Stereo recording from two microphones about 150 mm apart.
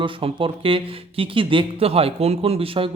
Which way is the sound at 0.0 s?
35° right (ahead or behind).